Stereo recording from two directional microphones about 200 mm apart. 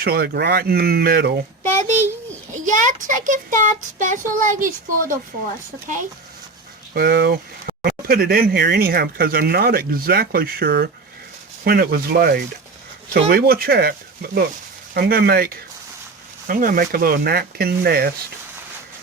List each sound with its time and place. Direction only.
0.0 s speech: 50° right (ahead or behind)
2.5 s child singing: 40° right (ahead or behind)
6.9 s speech: 50° right (ahead or behind)